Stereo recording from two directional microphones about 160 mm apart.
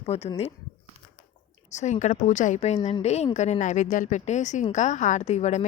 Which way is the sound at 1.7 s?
45° left (ahead or behind).